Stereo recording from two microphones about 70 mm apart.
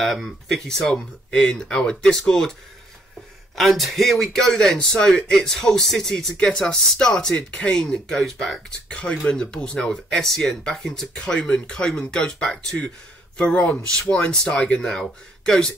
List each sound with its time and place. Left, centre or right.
0.0 s speech: centre
3.5 s a man's voice: centre
8.8 s a man's voice: centre